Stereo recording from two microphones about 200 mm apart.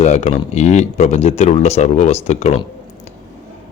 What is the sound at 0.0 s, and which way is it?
Speech, 35° left (ahead or behind).